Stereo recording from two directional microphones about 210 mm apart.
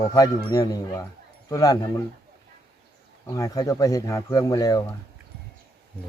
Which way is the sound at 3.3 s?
15° left (ahead or behind).